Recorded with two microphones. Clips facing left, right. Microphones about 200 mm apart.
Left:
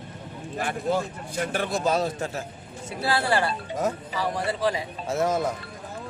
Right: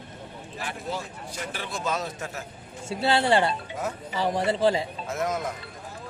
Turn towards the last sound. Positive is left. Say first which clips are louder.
# left 4 dB
turn(degrees=30)  # may be behind; listen again after turning